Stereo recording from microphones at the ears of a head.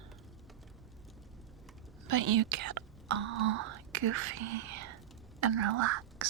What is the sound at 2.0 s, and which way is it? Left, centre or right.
Speech, right.